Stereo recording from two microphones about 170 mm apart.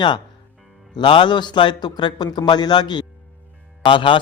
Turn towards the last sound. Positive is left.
turn(degrees=30)  # may be behind; listen again after turning